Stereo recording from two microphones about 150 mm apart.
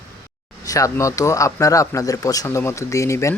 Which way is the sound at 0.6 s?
25° left (ahead or behind).